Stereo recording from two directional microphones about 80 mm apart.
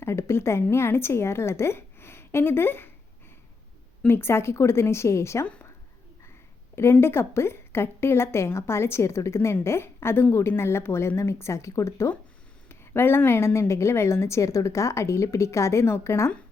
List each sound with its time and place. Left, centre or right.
0.0 s speech: left
4.0 s a woman's voice: left
7.0 s a woman's voice: left